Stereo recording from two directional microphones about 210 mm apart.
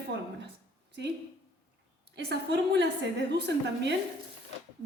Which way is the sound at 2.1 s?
55° right (ahead or behind).